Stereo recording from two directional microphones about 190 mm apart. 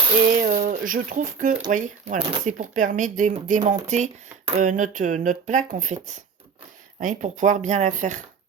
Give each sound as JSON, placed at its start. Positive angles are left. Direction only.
{"t": 0.3, "sound": "speech", "side_deg": -40}